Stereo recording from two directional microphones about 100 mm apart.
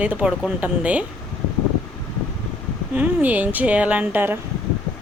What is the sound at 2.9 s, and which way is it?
Speech, 15° right (ahead or behind).